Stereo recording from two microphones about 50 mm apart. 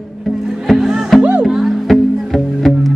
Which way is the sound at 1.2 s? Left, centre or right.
Right.